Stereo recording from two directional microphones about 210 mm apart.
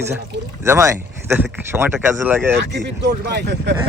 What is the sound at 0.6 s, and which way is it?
A man's voice, 15° right (ahead or behind).